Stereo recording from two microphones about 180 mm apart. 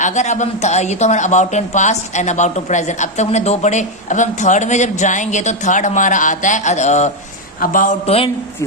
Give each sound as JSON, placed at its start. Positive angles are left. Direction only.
{"t": 0.0, "sound": "a woman's voice", "side_deg": 40}